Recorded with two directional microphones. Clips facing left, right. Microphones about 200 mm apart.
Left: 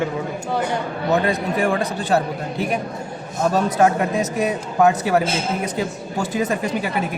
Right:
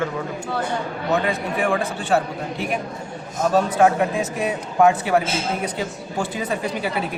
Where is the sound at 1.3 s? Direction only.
40° left (ahead or behind).